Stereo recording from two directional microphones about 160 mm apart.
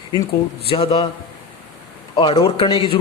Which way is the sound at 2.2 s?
35° left (ahead or behind).